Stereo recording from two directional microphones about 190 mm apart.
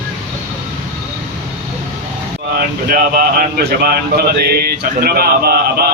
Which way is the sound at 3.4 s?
55° right (ahead or behind).